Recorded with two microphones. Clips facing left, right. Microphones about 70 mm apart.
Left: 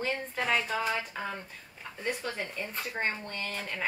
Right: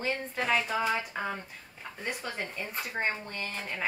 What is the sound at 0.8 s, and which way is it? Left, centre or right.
Speech, centre.